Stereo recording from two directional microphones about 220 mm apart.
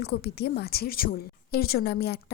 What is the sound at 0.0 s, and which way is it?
A woman's voice, 50° left (ahead or behind).